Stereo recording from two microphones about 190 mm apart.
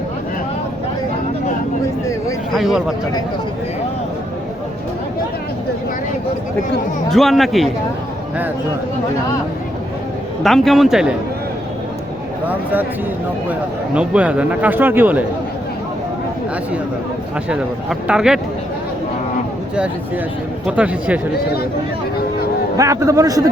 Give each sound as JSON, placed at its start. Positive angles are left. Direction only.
{"t": 2.6, "sound": "speech", "side_deg": 0}
{"t": 7.1, "sound": "speech", "side_deg": 0}
{"t": 10.4, "sound": "speech", "side_deg": 0}
{"t": 13.5, "sound": "speech", "side_deg": -5}
{"t": 17.5, "sound": "speech", "side_deg": -5}
{"t": 20.7, "sound": "speech", "side_deg": -5}
{"t": 22.8, "sound": "speech", "side_deg": -15}